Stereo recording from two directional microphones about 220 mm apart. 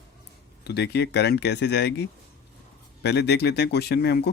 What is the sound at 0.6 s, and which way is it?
Speech, 50° left (ahead or behind).